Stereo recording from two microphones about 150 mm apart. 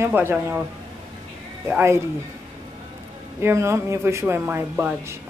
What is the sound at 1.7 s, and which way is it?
Speech, 15° right (ahead or behind).